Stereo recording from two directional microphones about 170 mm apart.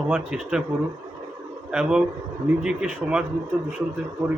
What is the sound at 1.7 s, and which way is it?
A man's voice, 5° right (ahead or behind).